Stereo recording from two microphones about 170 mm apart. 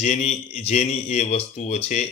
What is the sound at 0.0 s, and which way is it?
A man's voice, 40° left (ahead or behind).